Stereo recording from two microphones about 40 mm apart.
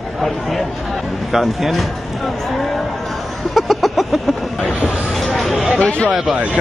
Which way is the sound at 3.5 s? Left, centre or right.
Centre.